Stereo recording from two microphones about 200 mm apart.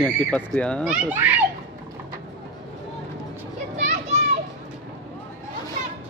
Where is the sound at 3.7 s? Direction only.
35° right (ahead or behind).